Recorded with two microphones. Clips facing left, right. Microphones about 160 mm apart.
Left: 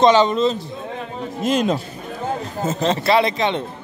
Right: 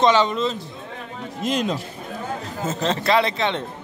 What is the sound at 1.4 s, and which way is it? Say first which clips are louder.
Speech: left 4 dB; 50° left (ahead or behind).